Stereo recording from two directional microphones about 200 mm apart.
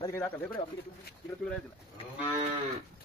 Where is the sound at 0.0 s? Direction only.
20° left (ahead or behind).